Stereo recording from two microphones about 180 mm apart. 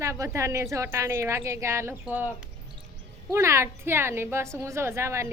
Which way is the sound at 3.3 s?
15° right (ahead or behind).